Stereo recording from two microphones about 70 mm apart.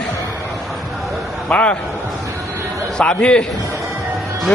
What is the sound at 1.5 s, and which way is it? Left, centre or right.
Speech, centre.